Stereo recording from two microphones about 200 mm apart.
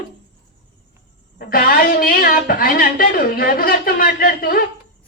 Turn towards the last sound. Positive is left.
turn(degrees=50)  # may be behind; listen again after turning